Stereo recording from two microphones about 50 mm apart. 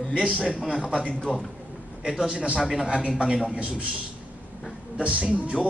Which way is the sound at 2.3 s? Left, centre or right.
Right.